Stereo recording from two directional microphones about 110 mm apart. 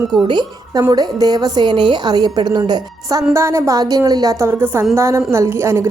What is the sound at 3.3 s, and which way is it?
A woman's voice, 25° right (ahead or behind).